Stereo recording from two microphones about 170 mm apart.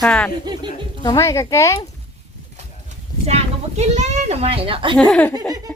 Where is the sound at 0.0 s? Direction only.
5° left (ahead or behind).